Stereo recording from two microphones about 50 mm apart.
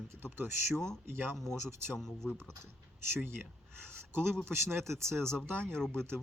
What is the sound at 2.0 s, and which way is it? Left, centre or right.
Speech, centre.